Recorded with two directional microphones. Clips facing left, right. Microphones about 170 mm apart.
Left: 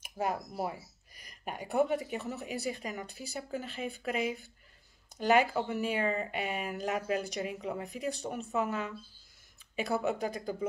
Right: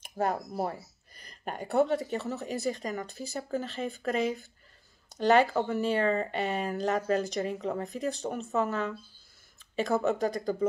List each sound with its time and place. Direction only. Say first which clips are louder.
0.0 s a sound: right 4 dB; 10° left (ahead or behind)
0.7 s speech: right 3 dB; 10° left (ahead or behind)
10.0 s speech: right 5 dB; 10° left (ahead or behind)